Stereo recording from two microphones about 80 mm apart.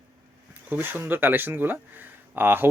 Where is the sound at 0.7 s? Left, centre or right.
Right.